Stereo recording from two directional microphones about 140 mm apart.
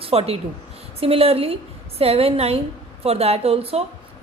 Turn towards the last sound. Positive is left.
turn(degrees=-45)  # may be behind; listen again after turning